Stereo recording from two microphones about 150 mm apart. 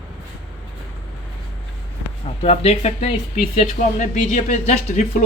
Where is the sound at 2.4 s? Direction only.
40° left (ahead or behind).